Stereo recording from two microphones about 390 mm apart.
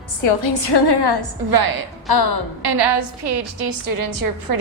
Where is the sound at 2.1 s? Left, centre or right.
Left.